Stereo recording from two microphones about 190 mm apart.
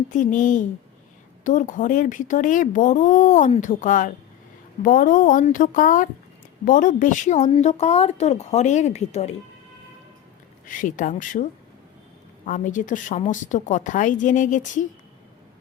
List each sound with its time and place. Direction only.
0.1 s a woman's voice: 40° left (ahead or behind)
10.7 s speech: 45° left (ahead or behind)
12.5 s a woman's voice: 45° left (ahead or behind)